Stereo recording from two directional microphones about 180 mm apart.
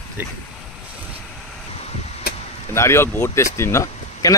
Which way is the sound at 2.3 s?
60° left (ahead or behind).